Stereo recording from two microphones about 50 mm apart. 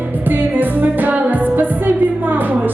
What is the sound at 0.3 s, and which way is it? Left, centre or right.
Music, right.